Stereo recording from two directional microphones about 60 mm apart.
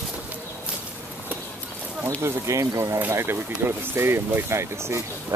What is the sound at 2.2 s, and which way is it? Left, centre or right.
Speech, right.